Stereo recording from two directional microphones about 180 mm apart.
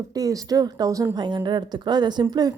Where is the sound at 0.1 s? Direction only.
20° right (ahead or behind).